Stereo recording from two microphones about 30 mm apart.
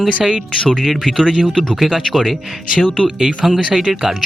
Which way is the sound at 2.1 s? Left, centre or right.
Centre.